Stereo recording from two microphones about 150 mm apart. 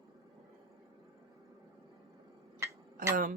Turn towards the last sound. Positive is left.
turn(degrees=-65)  # may be behind; listen again after turning